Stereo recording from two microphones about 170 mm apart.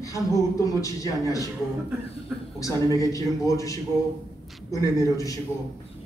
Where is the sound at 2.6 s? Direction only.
20° left (ahead or behind).